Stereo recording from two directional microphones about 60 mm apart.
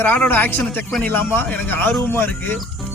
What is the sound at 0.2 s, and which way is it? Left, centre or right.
A man's voice, left.